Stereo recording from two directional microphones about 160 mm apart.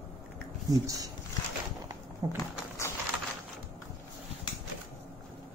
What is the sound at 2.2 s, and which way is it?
Speech, 20° right (ahead or behind).